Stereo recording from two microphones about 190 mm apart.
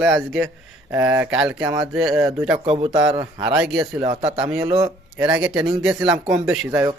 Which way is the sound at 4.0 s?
20° right (ahead or behind).